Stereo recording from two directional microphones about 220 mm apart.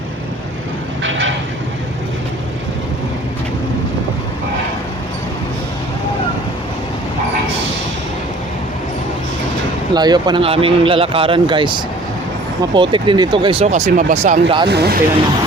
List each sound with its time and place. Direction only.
9.9 s speech: 20° right (ahead or behind)
12.7 s speech: 20° right (ahead or behind)
14.7 s speech: 45° right (ahead or behind)